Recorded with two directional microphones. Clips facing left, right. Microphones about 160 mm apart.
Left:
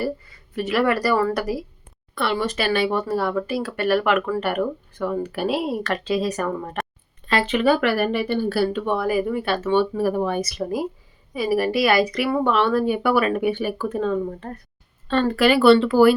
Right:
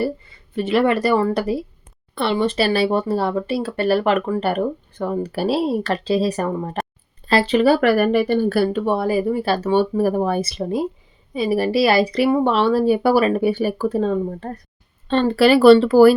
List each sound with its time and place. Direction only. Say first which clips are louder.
0.0 s speech: right 3 dB; 25° right (ahead or behind); by 8.9 s 45° right (ahead or behind)
8.9 s speech: right 3 dB; 30° right (ahead or behind)
10.4 s speech: right 3 dB; 25° right (ahead or behind)